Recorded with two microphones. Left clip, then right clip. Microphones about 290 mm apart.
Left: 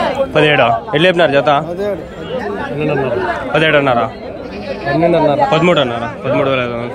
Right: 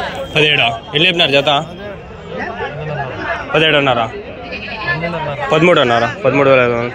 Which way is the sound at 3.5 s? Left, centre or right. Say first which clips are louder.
Even; centre.